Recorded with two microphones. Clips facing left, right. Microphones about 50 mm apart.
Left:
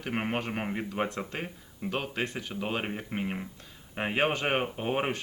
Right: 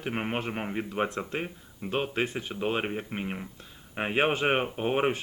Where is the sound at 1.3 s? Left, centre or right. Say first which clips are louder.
Right 3 dB; centre.